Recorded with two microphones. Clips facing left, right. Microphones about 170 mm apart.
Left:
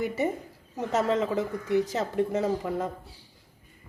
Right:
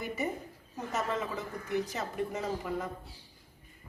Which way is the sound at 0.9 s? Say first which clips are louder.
Left 8 dB; 85° left.